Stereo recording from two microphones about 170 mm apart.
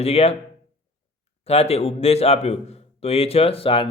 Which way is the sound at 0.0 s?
35° left (ahead or behind).